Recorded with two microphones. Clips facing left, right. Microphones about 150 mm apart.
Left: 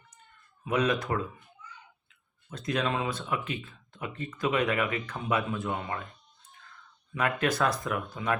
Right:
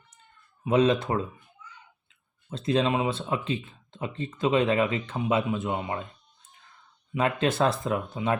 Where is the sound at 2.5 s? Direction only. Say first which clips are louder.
Right 5 dB; 25° right (ahead or behind).